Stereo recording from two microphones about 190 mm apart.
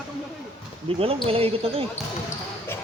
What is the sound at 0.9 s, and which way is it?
Speech, 30° right (ahead or behind).